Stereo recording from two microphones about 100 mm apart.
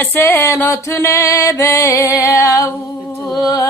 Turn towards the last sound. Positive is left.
turn(degrees=35)  # may be behind; listen again after turning